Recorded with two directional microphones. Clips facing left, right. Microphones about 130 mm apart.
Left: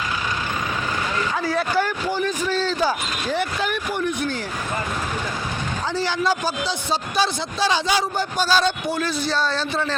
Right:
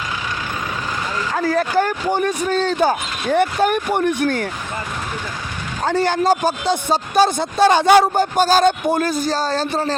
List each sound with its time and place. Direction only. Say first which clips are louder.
1.3 s speech: right 7 dB; 45° right (ahead or behind); by 4.4 s 65° right (ahead or behind)
5.8 s speech: right 7 dB; 55° right (ahead or behind)